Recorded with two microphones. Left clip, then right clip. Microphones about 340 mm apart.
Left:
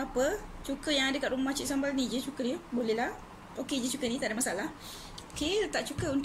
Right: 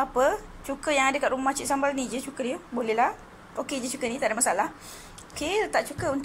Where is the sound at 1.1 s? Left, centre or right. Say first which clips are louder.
Right 7 dB; right.